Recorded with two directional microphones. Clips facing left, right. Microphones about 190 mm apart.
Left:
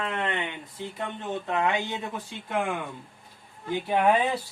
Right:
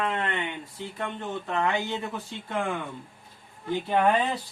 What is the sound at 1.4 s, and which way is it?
Speech, 15° left (ahead or behind).